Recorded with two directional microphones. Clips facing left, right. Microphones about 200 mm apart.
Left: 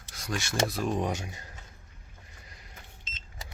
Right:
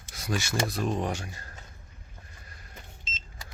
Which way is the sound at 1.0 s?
20° left (ahead or behind).